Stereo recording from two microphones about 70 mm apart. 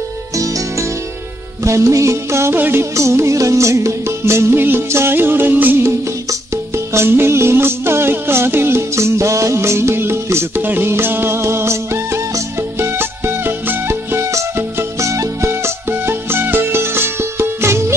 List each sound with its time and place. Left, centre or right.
1.6 s music: right
6.9 s music: right
14.8 s music: right